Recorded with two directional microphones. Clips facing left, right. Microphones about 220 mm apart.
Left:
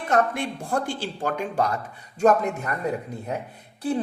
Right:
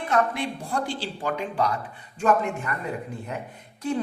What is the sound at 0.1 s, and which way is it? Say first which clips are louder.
A woman's voice: left 2 dB; 50° left (ahead or behind).